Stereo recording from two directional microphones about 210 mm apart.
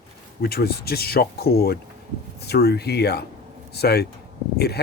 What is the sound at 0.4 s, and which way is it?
Speech, 50° left (ahead or behind).